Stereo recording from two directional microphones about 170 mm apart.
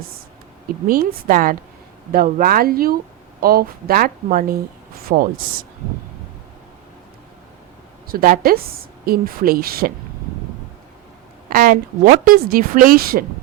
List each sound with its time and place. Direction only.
0.9 s a woman's voice: 55° right (ahead or behind)
8.0 s a woman's voice: 60° right (ahead or behind)
11.4 s a woman's voice: 55° right (ahead or behind)